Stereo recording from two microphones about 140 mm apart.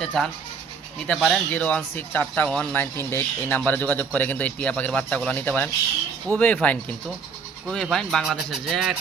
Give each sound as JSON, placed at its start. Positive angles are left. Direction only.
{"t": 0.0, "sound": "speech", "side_deg": 5}